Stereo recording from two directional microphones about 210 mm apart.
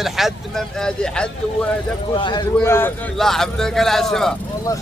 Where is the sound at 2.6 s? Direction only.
10° left (ahead or behind).